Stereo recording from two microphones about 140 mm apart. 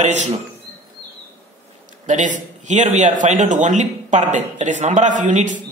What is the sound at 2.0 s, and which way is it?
A man's voice, 60° right (ahead or behind).